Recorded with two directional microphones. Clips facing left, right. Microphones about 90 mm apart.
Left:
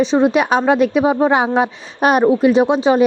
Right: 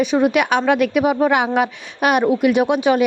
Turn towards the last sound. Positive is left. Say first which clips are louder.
# left 3 dB
turn(degrees=30)  # may be behind; listen again after turning